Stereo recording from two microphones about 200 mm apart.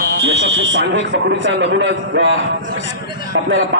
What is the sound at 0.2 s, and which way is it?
A man's voice, 55° right (ahead or behind).